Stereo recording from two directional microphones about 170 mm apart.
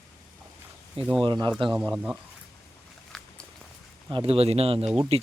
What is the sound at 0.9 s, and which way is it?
Speech, 5° right (ahead or behind).